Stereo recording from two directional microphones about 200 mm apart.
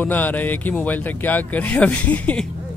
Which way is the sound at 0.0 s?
10° left (ahead or behind).